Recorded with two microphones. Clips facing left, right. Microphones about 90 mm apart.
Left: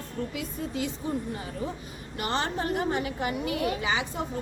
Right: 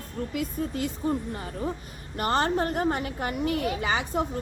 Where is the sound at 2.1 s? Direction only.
45° right (ahead or behind).